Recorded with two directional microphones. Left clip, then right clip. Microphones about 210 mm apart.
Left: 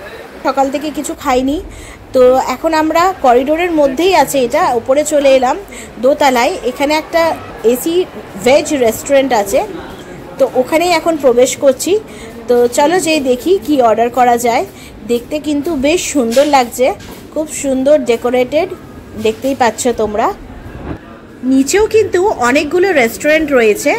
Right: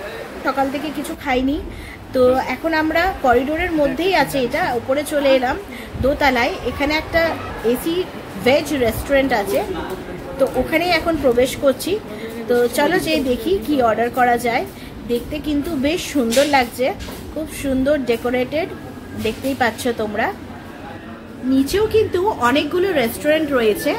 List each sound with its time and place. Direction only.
1.2 s a woman's voice: 25° left (ahead or behind)
10.7 s a woman's voice: 25° left (ahead or behind)
21.6 s a woman's voice: 30° left (ahead or behind)